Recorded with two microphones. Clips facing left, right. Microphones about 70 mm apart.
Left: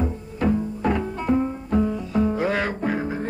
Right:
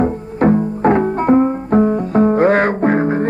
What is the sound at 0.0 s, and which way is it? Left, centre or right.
Music, right.